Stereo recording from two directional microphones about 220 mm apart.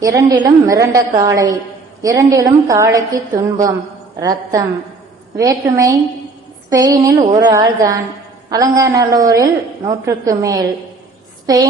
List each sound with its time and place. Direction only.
0.0 s a woman's voice: 15° right (ahead or behind)